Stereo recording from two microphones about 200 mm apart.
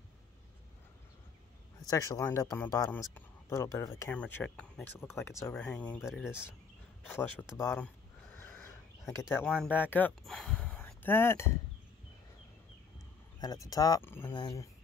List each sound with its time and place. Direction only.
1.9 s speech: 15° left (ahead or behind)
5.9 s speech: 5° right (ahead or behind)
7.1 s speech: 10° left (ahead or behind)
7.5 s a sound: 10° left (ahead or behind)
9.3 s speech: 10° left (ahead or behind)
13.4 s speech: 20° left (ahead or behind)